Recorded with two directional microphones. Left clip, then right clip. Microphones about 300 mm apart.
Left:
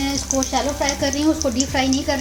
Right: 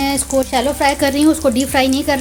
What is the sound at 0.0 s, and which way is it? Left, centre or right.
Speech, right.